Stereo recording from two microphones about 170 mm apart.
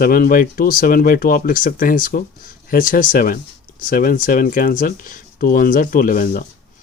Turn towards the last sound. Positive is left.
turn(degrees=55)  # may be behind; listen again after turning